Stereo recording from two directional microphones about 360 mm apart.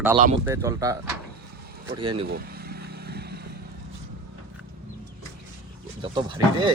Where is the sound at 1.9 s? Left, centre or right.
Centre.